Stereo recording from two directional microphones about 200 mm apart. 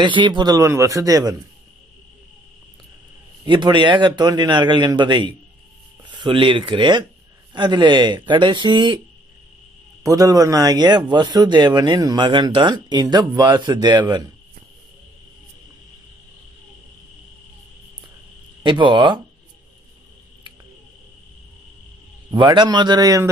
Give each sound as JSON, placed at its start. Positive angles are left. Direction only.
{"t": 0.0, "sound": "speech", "side_deg": -25}
{"t": 3.4, "sound": "a man's voice", "side_deg": -20}
{"t": 10.0, "sound": "a man's voice", "side_deg": -15}
{"t": 18.6, "sound": "a man's voice", "side_deg": -25}
{"t": 22.3, "sound": "a man's voice", "side_deg": -20}